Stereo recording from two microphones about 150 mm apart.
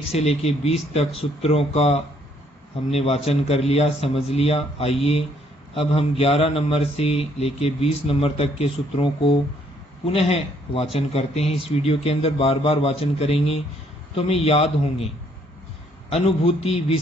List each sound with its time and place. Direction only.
0.1 s speech: 45° left (ahead or behind)
3.3 s mantra: 45° left (ahead or behind)
14.1 s speech: 45° left (ahead or behind)
16.1 s speech: 45° left (ahead or behind)